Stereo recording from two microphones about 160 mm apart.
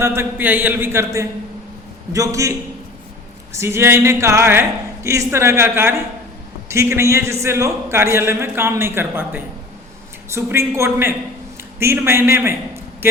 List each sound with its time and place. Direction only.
0.0 s a man's voice: 15° right (ahead or behind)